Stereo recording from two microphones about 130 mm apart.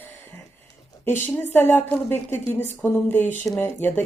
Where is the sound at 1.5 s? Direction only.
15° left (ahead or behind).